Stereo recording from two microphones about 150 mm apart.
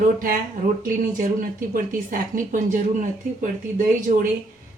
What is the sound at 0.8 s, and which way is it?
A woman's voice, 65° right (ahead or behind).